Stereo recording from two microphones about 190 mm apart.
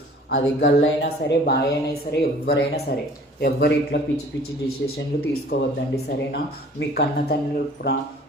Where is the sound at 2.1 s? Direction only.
50° left (ahead or behind).